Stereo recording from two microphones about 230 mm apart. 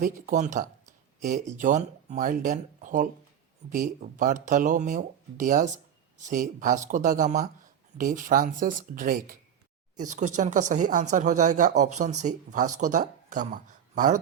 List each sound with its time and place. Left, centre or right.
0.0 s speech: right